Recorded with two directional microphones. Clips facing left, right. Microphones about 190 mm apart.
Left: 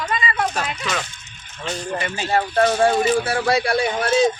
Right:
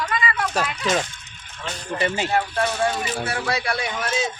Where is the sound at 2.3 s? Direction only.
40° left (ahead or behind).